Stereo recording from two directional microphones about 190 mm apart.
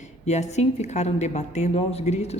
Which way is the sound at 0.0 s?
35° left (ahead or behind).